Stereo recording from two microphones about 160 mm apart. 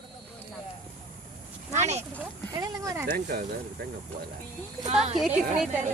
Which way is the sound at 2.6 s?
20° right (ahead or behind).